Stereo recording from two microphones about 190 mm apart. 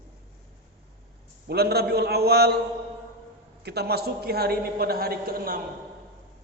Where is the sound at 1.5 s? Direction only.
55° right (ahead or behind).